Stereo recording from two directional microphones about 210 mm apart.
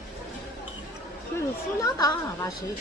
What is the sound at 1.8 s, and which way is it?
Speech, 15° left (ahead or behind).